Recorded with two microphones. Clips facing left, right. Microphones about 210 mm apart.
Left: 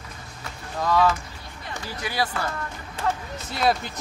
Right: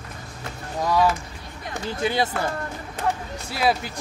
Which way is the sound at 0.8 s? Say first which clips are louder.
Even; 10° right (ahead or behind).